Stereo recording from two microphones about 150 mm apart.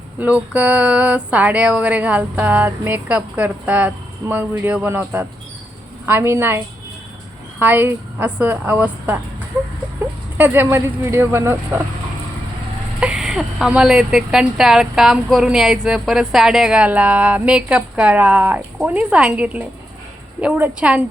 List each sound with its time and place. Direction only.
0.2 s speech: 10° right (ahead or behind)
7.6 s speech: 15° right (ahead or behind)
10.3 s speech: 15° right (ahead or behind)
13.0 s speech: 5° right (ahead or behind)